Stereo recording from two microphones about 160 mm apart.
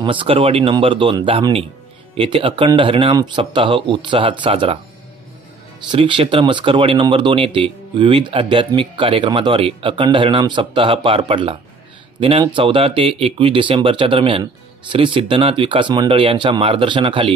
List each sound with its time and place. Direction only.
0.0 s speech: 30° right (ahead or behind)
5.9 s speech: 30° right (ahead or behind)